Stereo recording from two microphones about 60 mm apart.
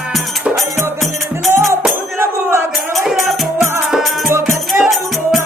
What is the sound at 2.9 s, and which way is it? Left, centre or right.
Music, centre.